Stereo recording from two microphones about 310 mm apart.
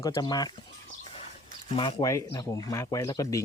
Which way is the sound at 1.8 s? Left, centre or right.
Centre.